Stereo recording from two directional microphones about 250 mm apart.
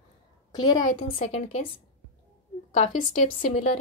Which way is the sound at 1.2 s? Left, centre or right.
Left.